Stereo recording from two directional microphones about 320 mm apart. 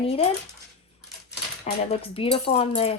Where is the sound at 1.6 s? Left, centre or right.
Centre.